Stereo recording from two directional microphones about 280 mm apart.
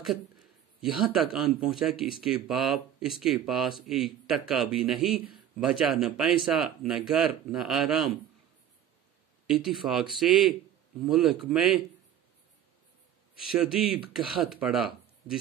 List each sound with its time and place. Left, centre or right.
0.7 s speech: centre
9.5 s speech: centre
13.6 s speech: centre